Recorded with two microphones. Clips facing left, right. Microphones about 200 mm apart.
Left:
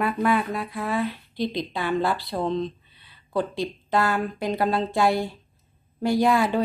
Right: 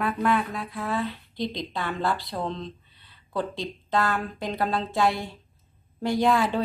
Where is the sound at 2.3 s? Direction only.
10° left (ahead or behind).